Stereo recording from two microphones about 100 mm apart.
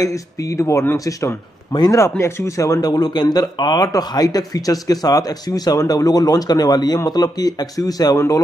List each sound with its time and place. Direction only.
0.0 s speech: 35° left (ahead or behind)
1.9 s speech: 30° left (ahead or behind)